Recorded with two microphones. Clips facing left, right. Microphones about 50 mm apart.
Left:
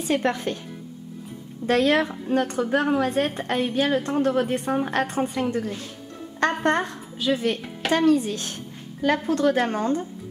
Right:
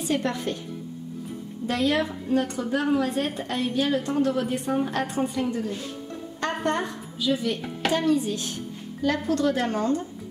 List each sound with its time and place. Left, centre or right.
0.0 s a woman's voice: left
1.7 s a woman's voice: left
6.4 s a woman's voice: left
9.3 s a woman's voice: left